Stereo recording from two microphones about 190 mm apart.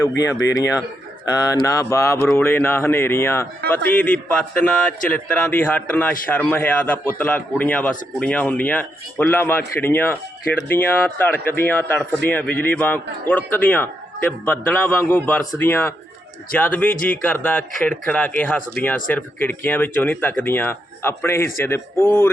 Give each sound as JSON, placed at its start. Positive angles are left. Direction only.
{"t": 0.2, "sound": "speech", "side_deg": 15}